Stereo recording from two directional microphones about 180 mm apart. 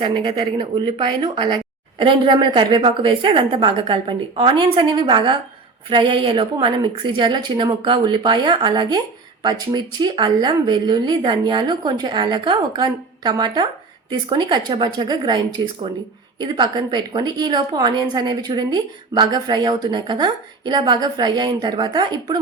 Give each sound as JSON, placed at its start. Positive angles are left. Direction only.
{"t": 0.0, "sound": "a woman's voice", "side_deg": -25}